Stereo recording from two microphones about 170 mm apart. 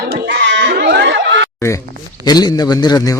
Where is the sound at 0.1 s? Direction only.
90° right.